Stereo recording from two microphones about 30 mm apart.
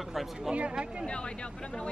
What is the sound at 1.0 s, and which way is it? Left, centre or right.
Speech, left.